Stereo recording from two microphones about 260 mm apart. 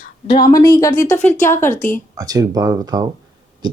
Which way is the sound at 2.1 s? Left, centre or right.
Centre.